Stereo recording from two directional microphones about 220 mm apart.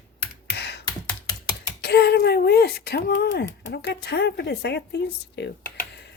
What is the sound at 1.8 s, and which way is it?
Speech, 45° left (ahead or behind).